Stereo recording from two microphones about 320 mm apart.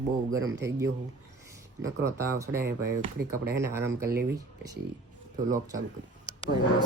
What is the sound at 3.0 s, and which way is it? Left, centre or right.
Speech, right.